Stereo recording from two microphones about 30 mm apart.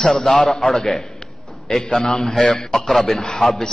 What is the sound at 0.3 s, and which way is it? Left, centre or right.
Speech, centre.